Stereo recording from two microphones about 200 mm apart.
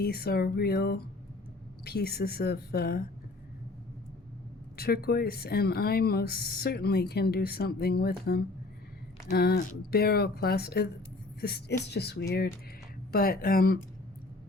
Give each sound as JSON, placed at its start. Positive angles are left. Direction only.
{"t": 0.0, "sound": "speech", "side_deg": 50}
{"t": 4.8, "sound": "speech", "side_deg": 50}